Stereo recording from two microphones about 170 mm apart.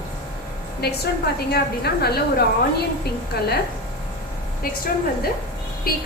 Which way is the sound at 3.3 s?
70° left (ahead or behind).